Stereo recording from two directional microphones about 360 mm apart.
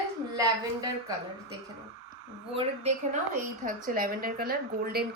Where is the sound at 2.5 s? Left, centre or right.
Centre.